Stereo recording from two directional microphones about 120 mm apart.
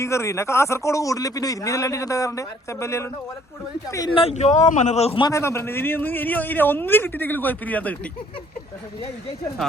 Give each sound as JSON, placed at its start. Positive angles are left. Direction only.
{"t": 0.0, "sound": "a man's voice", "side_deg": 25}
{"t": 4.1, "sound": "speech", "side_deg": 55}
{"t": 5.3, "sound": "a man's voice", "side_deg": 25}